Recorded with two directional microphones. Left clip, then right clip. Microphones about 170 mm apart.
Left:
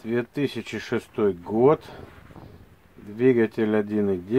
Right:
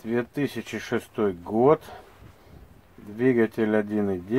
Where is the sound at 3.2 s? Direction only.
25° left (ahead or behind).